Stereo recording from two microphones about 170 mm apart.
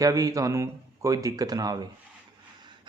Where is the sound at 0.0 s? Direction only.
20° right (ahead or behind).